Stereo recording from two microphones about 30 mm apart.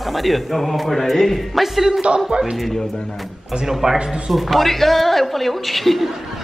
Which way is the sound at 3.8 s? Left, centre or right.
Centre.